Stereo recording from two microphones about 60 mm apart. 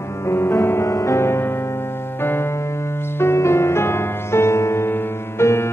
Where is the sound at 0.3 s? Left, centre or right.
Left.